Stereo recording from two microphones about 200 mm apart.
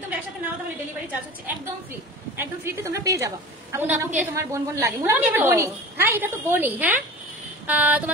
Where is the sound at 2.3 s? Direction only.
10° right (ahead or behind).